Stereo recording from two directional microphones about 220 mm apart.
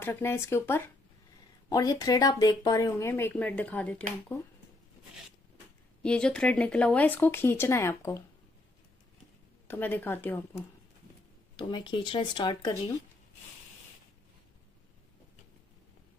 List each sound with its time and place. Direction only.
0.0 s speech: 10° left (ahead or behind)
6.0 s speech: 5° left (ahead or behind)
9.7 s speech: 10° left (ahead or behind)
11.5 s speech: 20° left (ahead or behind)